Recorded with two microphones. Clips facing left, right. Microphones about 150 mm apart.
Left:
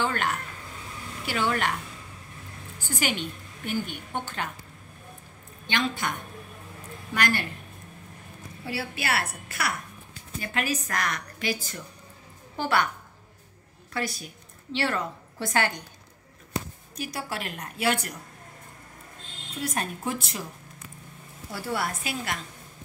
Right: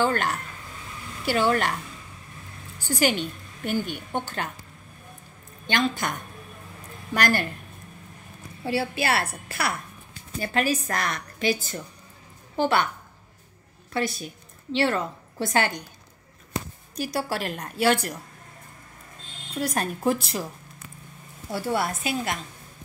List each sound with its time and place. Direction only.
0.0 s a woman's voice: 35° right (ahead or behind)
2.9 s a woman's voice: 35° right (ahead or behind)
5.7 s a woman's voice: 40° right (ahead or behind)
7.2 s a woman's voice: 40° right (ahead or behind)
8.6 s a woman's voice: 30° right (ahead or behind)
13.9 s a woman's voice: 25° right (ahead or behind)
16.9 s a woman's voice: 35° right (ahead or behind)
19.6 s a woman's voice: 40° right (ahead or behind)
21.5 s a woman's voice: 25° right (ahead or behind)